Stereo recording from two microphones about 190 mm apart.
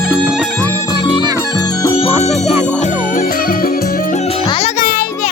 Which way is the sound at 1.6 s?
25° left (ahead or behind).